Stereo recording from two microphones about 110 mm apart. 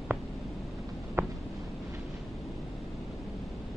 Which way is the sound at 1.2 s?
20° right (ahead or behind).